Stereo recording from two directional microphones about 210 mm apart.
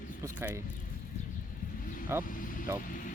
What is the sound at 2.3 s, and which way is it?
Vehicle, 40° left (ahead or behind).